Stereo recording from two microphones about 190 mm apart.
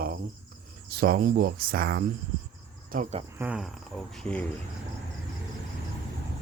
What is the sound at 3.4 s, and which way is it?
Mantra, 5° right (ahead or behind).